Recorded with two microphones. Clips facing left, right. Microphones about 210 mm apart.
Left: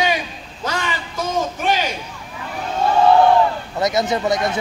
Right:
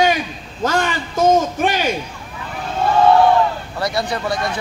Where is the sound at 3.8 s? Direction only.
20° left (ahead or behind).